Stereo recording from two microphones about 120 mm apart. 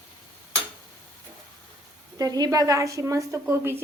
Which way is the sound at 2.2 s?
30° right (ahead or behind).